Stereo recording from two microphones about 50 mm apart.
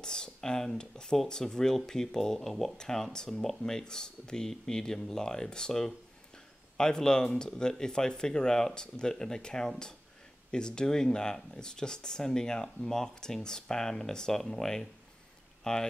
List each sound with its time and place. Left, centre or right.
0.0 s speech: centre